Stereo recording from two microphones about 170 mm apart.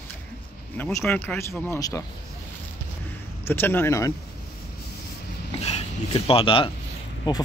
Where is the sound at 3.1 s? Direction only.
10° left (ahead or behind).